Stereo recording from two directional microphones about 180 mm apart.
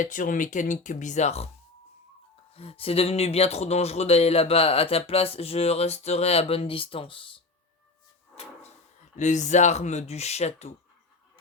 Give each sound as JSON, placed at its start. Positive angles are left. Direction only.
{"t": 0.0, "sound": "speech", "side_deg": 45}
{"t": 2.6, "sound": "speech", "side_deg": 35}
{"t": 9.1, "sound": "speech", "side_deg": 40}